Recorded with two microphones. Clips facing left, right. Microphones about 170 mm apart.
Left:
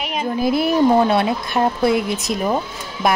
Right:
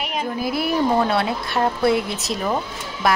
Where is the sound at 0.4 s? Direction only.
20° left (ahead or behind).